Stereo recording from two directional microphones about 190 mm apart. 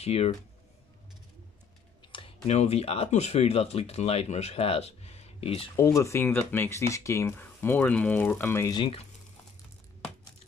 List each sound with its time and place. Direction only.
0.0 s speech: 30° left (ahead or behind)
2.1 s speech: 30° left (ahead or behind)
5.8 s speech: 15° left (ahead or behind)